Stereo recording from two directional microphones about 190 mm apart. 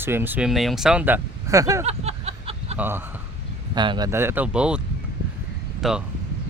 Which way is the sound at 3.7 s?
25° right (ahead or behind).